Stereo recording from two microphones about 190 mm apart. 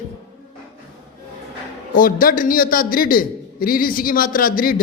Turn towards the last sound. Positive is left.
turn(degrees=45)  # may be behind; listen again after turning